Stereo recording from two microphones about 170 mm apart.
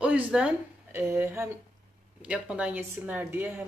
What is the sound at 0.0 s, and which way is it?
Speech, 10° right (ahead or behind).